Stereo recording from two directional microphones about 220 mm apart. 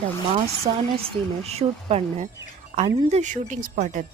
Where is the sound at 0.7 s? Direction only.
30° right (ahead or behind).